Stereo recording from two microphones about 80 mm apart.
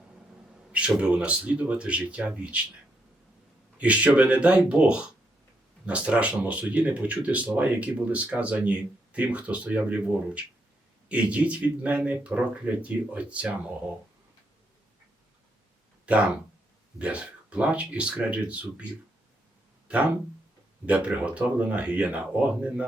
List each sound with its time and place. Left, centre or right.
0.7 s speech: centre
3.8 s speech: centre
17.0 s speech: centre
20.8 s speech: centre